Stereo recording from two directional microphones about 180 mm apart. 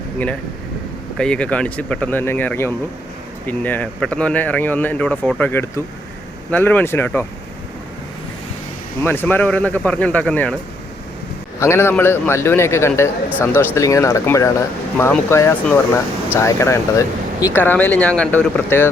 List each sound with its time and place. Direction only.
1.2 s speech: 5° left (ahead or behind)
9.0 s speech: 10° left (ahead or behind)
11.6 s speech: 15° left (ahead or behind)